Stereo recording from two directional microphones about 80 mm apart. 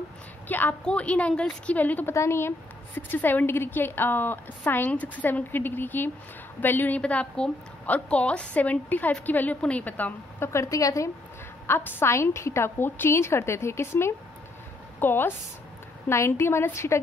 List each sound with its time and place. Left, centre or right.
0.5 s a woman's voice: left
2.1 s a woman's voice: left
10.4 s a woman's voice: left
11.6 s a woman's voice: left